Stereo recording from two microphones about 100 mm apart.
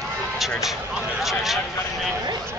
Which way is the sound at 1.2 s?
Centre (ahead or behind).